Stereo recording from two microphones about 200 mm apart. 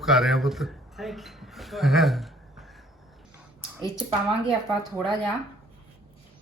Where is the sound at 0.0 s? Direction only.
Centre (ahead or behind).